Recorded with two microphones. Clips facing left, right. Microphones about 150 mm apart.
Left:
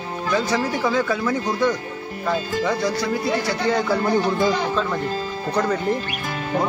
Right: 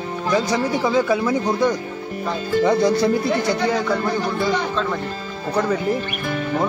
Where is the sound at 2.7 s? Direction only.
25° right (ahead or behind).